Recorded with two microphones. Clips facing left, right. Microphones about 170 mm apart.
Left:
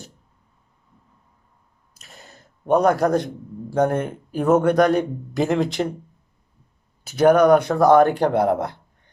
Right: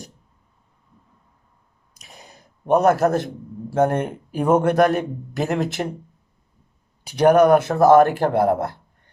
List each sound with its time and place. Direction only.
2.0 s a sound: 15° right (ahead or behind)
3.7 s a man's voice: 5° right (ahead or behind)
7.0 s a man's voice: 10° right (ahead or behind)